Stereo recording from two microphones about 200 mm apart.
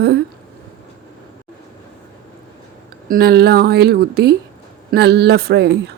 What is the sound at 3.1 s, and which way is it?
Speech, 50° right (ahead or behind).